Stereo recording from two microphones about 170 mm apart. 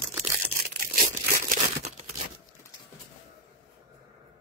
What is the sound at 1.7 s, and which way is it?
Tearing, 40° right (ahead or behind).